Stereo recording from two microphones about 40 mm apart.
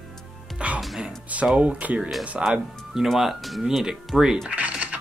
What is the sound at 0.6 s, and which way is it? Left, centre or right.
Speech, right.